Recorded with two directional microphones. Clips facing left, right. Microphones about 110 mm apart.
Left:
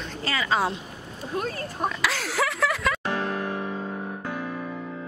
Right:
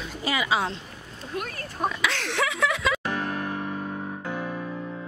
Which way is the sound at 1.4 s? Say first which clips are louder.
Left 4 dB; 30° left (ahead or behind).